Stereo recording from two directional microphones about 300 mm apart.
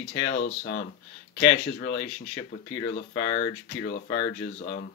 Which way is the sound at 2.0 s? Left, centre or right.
Centre.